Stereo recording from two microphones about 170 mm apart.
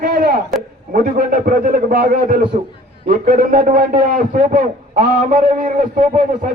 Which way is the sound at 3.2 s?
55° right (ahead or behind).